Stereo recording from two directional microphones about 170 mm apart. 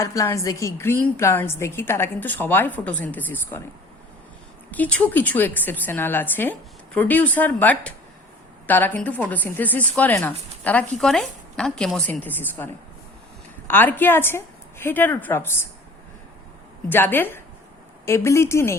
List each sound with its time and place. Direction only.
0.0 s a woman's voice: 15° left (ahead or behind)
4.7 s a woman's voice: 10° left (ahead or behind)
16.9 s a woman's voice: 10° left (ahead or behind)